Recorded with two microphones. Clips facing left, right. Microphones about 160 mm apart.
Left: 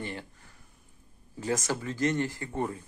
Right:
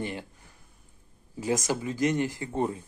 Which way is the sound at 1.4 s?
15° right (ahead or behind).